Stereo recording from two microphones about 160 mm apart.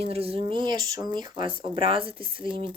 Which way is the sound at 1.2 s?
30° right (ahead or behind).